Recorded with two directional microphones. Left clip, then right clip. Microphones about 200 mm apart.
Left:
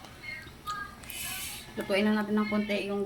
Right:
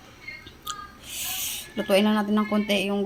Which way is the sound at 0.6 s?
30° right (ahead or behind).